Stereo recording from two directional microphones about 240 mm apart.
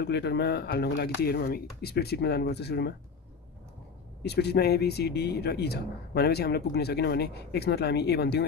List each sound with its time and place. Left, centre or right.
0.0 s speech: left
4.2 s speech: left